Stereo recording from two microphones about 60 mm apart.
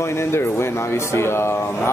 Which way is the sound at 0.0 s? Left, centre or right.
Left.